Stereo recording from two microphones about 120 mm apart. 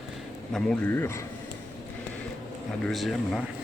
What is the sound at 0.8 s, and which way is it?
Speech, 20° left (ahead or behind).